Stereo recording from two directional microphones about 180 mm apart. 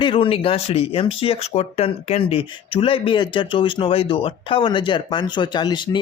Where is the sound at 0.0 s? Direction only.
30° left (ahead or behind).